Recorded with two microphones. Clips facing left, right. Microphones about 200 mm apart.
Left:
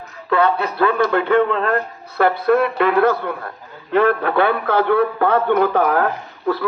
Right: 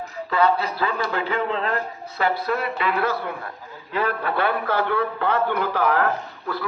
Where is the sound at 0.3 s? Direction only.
60° left (ahead or behind).